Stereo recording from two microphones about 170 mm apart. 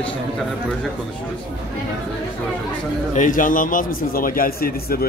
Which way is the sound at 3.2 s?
50° left (ahead or behind).